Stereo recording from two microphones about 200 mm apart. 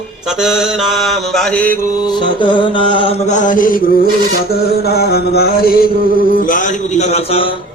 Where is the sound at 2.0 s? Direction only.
20° left (ahead or behind); by 4.0 s 45° left (ahead or behind).